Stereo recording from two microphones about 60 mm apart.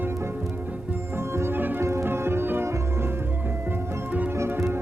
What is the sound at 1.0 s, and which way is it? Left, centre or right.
Music, right.